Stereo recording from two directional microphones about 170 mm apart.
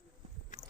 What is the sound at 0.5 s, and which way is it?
Boat, 45° left (ahead or behind).